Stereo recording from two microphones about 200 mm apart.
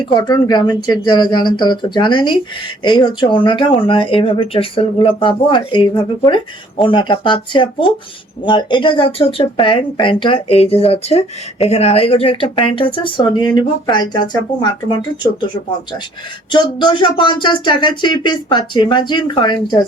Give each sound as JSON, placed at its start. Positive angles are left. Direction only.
{"t": 0.0, "sound": "speech", "side_deg": 20}
{"t": 16.5, "sound": "speech", "side_deg": 25}